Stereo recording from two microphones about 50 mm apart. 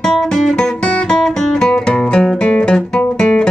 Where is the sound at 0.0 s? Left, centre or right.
Centre.